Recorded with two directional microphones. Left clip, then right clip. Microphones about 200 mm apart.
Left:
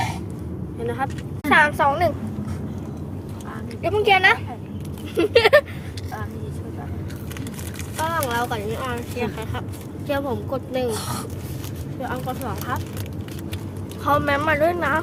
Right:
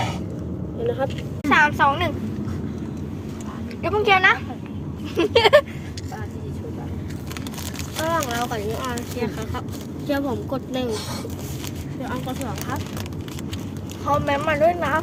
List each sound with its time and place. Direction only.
1.5 s speech: 5° left (ahead or behind)
3.8 s speech: 5° left (ahead or behind)
8.1 s speech: 15° left (ahead or behind)
14.0 s speech: 20° left (ahead or behind)